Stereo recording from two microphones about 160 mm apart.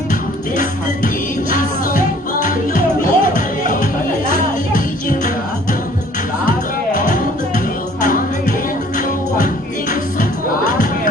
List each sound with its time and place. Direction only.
0.1 s music: 60° left (ahead or behind)
6.9 s music: 60° left (ahead or behind)